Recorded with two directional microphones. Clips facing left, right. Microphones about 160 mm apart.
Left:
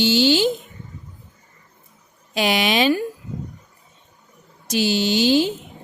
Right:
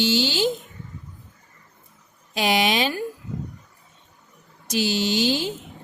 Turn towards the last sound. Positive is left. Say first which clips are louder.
# left 5 dB
turn(degrees=75)  # may be behind; listen again after turning